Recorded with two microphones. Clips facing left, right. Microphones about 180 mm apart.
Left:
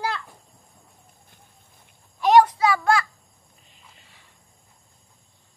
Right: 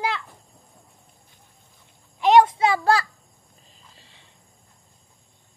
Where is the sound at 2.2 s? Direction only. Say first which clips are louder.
Even; 20° right (ahead or behind).